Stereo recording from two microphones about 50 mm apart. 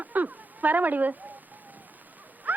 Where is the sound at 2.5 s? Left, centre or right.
Right.